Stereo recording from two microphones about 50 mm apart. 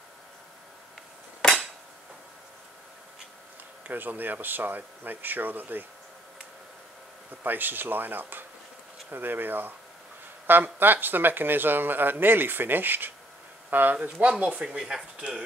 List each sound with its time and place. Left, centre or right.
3.8 s speech: right
7.4 s speech: right
13.9 s speech: right
14.6 s speech: centre